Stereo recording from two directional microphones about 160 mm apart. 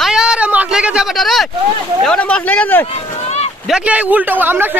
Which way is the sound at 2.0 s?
5° left (ahead or behind).